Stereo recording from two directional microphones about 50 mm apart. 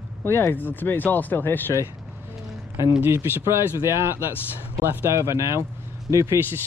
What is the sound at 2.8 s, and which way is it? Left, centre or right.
Speech, right.